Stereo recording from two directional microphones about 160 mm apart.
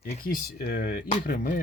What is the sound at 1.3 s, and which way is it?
Speech, 55° left (ahead or behind).